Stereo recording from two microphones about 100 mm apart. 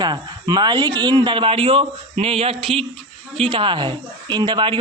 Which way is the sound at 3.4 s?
55° right (ahead or behind).